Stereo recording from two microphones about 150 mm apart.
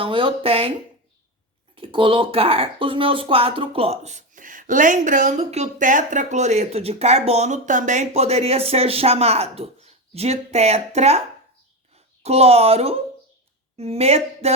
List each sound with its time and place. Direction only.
0.0 s speech: 35° right (ahead or behind)
1.7 s speech: 35° right (ahead or behind)
12.2 s speech: 45° right (ahead or behind)